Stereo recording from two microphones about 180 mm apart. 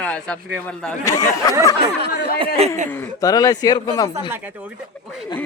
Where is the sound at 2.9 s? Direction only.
15° left (ahead or behind).